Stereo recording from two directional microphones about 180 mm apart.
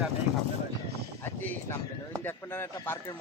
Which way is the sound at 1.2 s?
10° left (ahead or behind).